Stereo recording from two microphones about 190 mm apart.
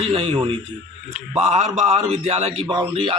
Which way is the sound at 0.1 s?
30° right (ahead or behind).